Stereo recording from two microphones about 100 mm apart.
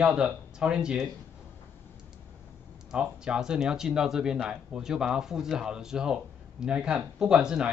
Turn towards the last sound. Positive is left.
turn(degrees=-10)  # may be behind; listen again after turning